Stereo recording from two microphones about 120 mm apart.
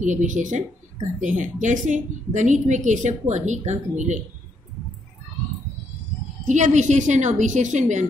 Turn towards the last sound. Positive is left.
turn(degrees=-90)